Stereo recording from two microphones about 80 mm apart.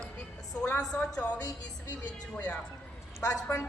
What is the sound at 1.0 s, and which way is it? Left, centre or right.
Speech, centre.